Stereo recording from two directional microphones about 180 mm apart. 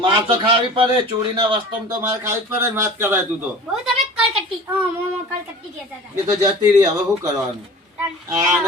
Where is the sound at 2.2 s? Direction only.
15° right (ahead or behind).